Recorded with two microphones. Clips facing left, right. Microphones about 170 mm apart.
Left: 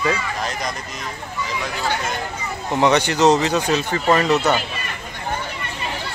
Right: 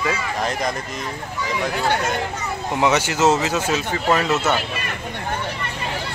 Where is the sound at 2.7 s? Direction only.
5° right (ahead or behind).